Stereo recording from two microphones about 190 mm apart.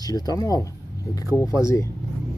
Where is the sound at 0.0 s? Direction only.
20° left (ahead or behind).